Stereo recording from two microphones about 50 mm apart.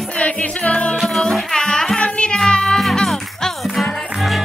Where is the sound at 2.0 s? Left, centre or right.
Left.